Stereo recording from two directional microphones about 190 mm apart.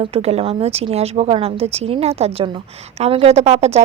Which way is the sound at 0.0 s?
30° right (ahead or behind).